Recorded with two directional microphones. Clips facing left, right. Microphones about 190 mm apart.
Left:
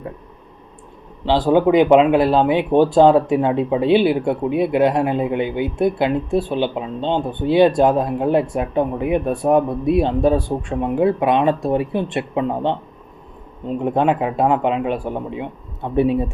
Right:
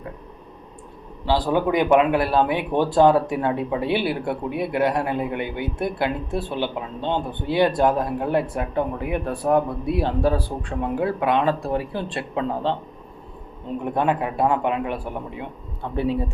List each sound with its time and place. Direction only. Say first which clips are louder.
1.3 s speech: left 6 dB; 20° left (ahead or behind)
13.8 s speech: left 5 dB; 20° left (ahead or behind)